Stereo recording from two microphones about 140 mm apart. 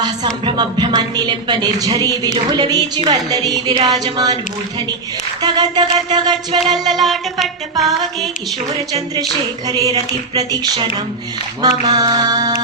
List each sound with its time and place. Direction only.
0.0 s a woman's voice: 30° right (ahead or behind)
5.4 s a woman's voice: 30° right (ahead or behind)
6.7 s music: centre (ahead or behind)
9.6 s a woman's voice: 25° right (ahead or behind)